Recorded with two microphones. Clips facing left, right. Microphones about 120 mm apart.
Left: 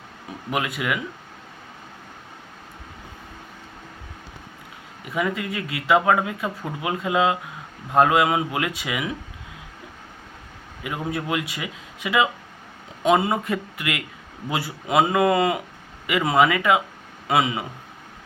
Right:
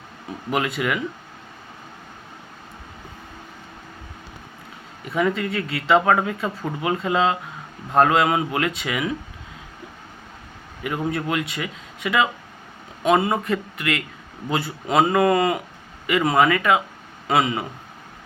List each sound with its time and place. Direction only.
0.3 s speech: 5° left (ahead or behind)
5.1 s speech: 10° left (ahead or behind)
10.8 s speech: 10° left (ahead or behind)
17.2 s speech: 5° left (ahead or behind)